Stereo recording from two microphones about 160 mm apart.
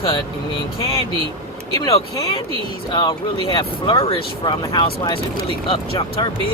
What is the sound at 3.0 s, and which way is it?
Speech, 30° left (ahead or behind).